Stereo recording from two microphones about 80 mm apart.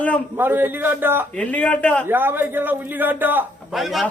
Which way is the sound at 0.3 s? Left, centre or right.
Right.